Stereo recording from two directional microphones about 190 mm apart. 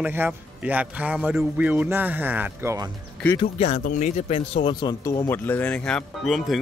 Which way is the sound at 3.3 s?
30° left (ahead or behind).